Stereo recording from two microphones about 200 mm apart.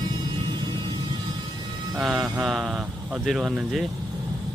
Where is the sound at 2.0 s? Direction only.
Centre (ahead or behind).